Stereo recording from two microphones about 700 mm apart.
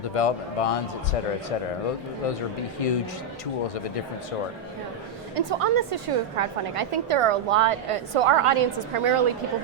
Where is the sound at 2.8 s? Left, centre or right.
Left.